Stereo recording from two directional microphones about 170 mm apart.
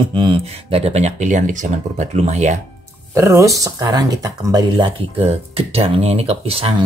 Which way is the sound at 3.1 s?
15° right (ahead or behind).